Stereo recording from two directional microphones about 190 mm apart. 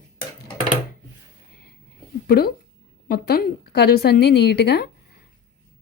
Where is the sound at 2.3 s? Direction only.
55° left (ahead or behind).